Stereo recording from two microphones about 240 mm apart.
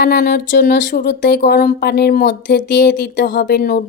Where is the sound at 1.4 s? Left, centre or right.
Left.